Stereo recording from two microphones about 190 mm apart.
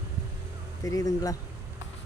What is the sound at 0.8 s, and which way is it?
Speech, 20° left (ahead or behind).